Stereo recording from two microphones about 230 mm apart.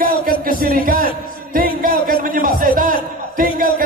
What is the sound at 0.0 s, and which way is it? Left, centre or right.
Music, right.